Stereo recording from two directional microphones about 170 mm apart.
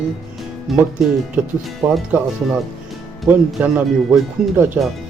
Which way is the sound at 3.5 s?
10° right (ahead or behind).